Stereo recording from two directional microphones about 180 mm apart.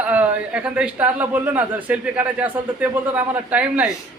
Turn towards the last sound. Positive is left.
turn(degrees=-5)  # may be behind; listen again after turning